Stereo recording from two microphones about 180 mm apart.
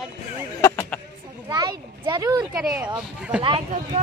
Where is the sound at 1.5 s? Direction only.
20° right (ahead or behind).